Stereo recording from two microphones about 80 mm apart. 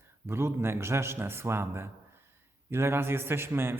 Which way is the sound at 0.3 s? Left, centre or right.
Right.